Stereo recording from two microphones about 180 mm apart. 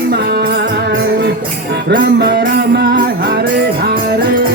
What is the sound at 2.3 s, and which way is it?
Music, 60° right (ahead or behind).